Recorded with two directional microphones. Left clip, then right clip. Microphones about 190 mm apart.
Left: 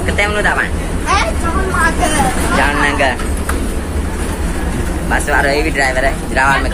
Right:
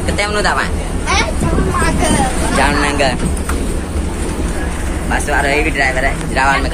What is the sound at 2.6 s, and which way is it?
Speech, 15° right (ahead or behind).